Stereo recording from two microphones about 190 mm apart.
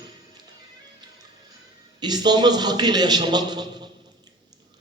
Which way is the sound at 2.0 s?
20° right (ahead or behind).